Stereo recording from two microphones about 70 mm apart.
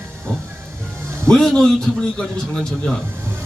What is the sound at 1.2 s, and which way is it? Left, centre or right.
Speech, centre.